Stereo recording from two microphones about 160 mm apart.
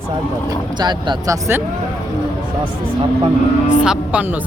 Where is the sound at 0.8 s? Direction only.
25° right (ahead or behind).